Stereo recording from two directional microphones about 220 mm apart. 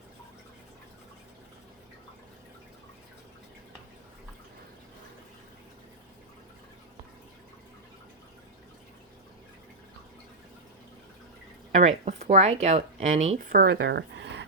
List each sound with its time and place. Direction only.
11.7 s speech: 30° right (ahead or behind); by 14.4 s 50° right (ahead or behind)